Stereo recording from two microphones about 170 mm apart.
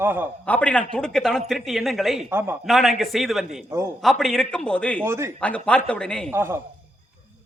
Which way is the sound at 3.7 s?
15° right (ahead or behind).